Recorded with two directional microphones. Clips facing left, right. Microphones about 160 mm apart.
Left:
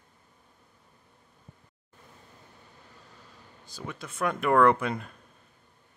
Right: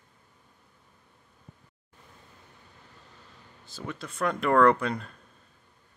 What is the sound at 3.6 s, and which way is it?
Speech, 15° left (ahead or behind).